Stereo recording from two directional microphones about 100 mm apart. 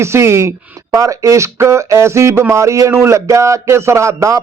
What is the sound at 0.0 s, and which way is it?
A man's voice, 25° right (ahead or behind).